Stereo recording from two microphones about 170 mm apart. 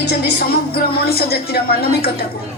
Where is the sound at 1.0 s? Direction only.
65° left (ahead or behind).